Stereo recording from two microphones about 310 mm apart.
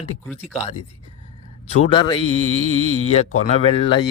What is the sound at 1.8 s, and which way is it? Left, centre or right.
Speech, centre.